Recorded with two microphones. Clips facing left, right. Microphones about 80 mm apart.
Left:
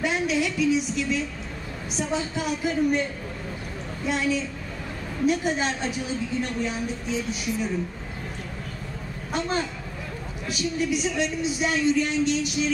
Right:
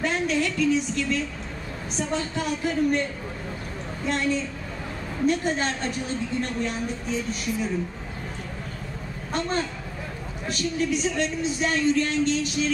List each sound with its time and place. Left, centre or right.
0.0 s a woman's voice: centre
9.3 s a woman's voice: centre